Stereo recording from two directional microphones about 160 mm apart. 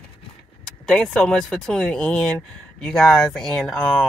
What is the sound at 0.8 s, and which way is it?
Speech, 5° left (ahead or behind).